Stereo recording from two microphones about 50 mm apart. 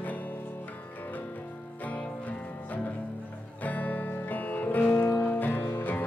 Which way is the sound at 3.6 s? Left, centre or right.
Left.